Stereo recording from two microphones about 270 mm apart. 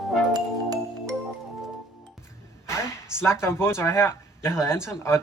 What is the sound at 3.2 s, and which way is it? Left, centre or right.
Speech, centre.